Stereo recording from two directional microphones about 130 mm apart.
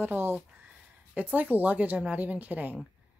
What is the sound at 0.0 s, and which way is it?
Speech, 15° right (ahead or behind).